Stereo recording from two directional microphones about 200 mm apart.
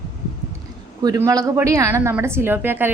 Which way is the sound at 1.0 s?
15° right (ahead or behind).